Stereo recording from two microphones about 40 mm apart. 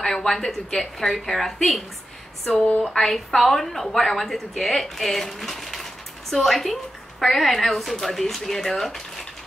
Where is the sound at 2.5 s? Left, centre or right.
Left.